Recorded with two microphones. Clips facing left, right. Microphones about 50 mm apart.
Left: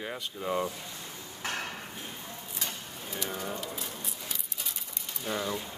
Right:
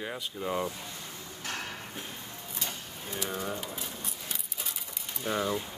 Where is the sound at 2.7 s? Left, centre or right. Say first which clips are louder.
Even; centre.